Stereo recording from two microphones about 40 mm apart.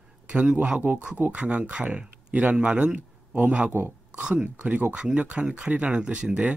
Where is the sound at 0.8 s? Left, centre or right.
Right.